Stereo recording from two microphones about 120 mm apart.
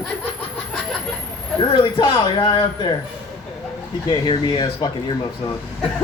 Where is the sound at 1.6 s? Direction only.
40° left (ahead or behind).